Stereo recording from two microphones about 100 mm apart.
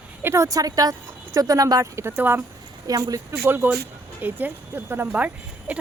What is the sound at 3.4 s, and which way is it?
Speech, 20° right (ahead or behind).